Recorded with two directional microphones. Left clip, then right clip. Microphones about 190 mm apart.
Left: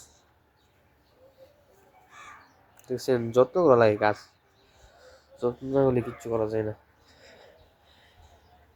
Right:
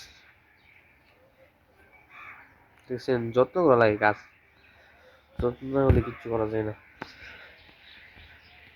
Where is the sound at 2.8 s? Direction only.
15° left (ahead or behind).